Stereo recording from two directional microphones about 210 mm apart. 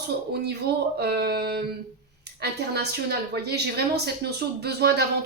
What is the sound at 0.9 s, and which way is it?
Speech, 50° right (ahead or behind).